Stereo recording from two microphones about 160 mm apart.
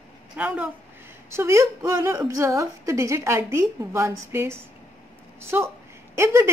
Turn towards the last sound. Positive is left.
turn(degrees=-15)  # may be behind; listen again after turning